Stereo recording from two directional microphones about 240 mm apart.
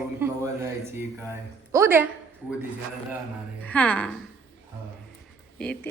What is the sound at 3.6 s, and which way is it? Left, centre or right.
Speech, centre.